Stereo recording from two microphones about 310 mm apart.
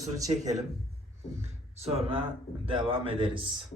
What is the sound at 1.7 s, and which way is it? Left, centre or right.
A man's voice, centre.